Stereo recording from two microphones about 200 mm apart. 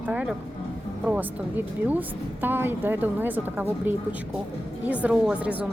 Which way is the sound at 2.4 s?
10° right (ahead or behind).